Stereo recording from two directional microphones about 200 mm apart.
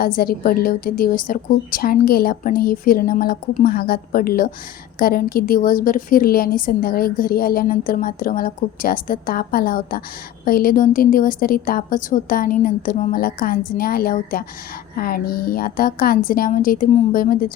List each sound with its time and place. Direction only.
0.0 s a woman's voice: 45° left (ahead or behind)